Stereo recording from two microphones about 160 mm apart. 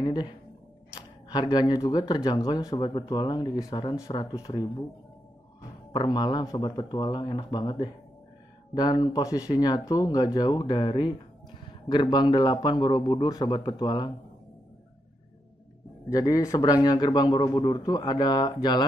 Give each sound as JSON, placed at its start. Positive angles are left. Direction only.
{"t": 0.0, "sound": "speech", "side_deg": 25}
{"t": 5.9, "sound": "speech", "side_deg": 30}
{"t": 16.1, "sound": "speech", "side_deg": 20}